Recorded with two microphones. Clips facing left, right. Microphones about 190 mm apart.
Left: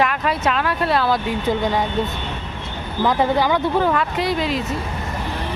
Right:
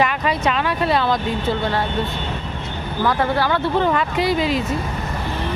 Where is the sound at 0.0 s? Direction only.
Centre (ahead or behind).